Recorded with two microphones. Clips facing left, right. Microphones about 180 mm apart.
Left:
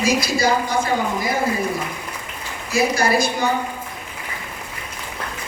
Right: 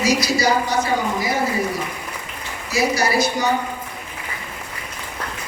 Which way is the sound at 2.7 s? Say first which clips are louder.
Left 1 dB; 55° left (ahead or behind).